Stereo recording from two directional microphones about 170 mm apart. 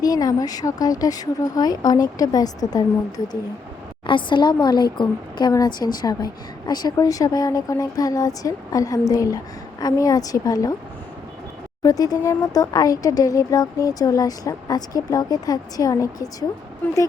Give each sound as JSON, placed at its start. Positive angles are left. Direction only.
{"t": 0.0, "sound": "speech", "side_deg": 20}
{"t": 4.0, "sound": "speech", "side_deg": 30}
{"t": 11.8, "sound": "speech", "side_deg": 20}